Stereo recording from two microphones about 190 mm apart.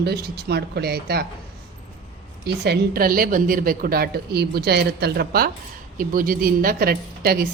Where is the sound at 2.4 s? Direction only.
55° right (ahead or behind).